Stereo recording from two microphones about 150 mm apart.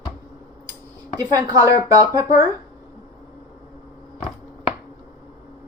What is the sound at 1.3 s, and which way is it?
Speech, 25° right (ahead or behind).